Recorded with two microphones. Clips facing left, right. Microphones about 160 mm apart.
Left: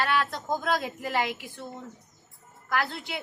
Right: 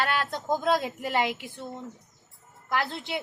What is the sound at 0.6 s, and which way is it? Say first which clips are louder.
A woman's voice: right 3 dB; 25° right (ahead or behind).